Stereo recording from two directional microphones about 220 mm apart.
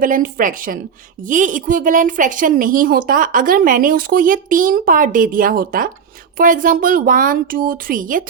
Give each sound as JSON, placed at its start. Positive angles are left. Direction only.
{"t": 0.0, "sound": "speech", "side_deg": -40}